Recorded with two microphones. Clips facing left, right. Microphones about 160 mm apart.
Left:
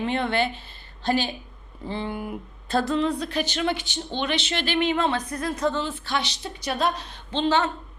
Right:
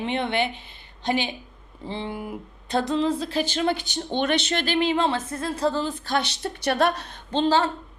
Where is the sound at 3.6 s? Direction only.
40° right (ahead or behind).